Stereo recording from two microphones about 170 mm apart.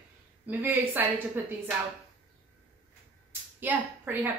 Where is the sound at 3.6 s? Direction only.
10° right (ahead or behind).